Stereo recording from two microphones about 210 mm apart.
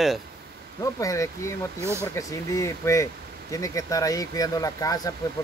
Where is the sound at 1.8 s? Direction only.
10° right (ahead or behind).